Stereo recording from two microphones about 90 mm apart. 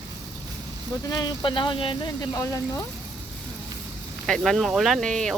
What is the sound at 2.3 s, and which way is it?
Speech, 35° left (ahead or behind).